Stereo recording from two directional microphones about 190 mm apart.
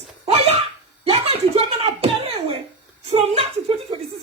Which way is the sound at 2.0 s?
30° right (ahead or behind).